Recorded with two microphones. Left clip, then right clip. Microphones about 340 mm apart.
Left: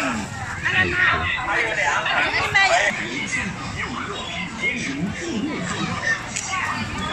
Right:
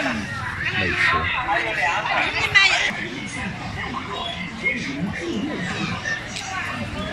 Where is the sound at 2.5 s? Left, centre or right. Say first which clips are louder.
Right 1 dB; left.